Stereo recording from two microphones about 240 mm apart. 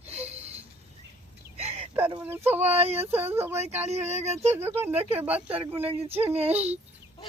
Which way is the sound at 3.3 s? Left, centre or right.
Centre.